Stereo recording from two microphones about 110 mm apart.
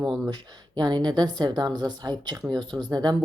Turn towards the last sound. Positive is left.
turn(degrees=-40)  # may be behind; listen again after turning